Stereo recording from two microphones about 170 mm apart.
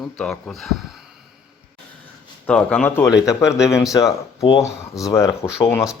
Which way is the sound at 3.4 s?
5° right (ahead or behind).